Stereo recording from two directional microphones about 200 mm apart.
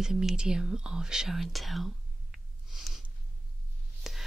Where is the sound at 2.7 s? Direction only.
Centre (ahead or behind).